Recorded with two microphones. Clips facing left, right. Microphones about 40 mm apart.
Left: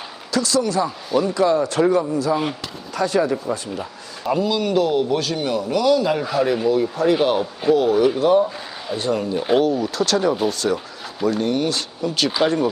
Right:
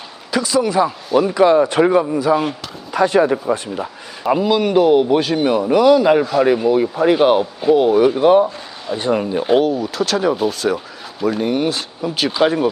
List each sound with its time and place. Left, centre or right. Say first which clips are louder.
0.3 s speech: right 3 dB; centre
1.3 s speech: right 7 dB; right
9.4 s speech: right 1 dB; centre